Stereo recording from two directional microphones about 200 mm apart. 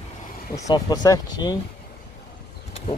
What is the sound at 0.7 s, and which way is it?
Speech, 20° left (ahead or behind).